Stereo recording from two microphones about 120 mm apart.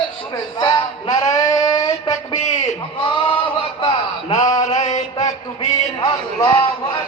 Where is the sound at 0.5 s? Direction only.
35° left (ahead or behind).